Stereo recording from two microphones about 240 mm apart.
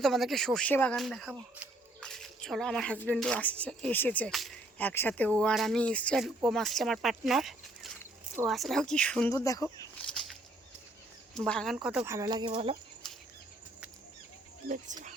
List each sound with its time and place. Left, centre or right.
0.0 s speech: centre
10.0 s a sound: centre
11.3 s speech: centre; by 12.7 s right
14.9 s speech: right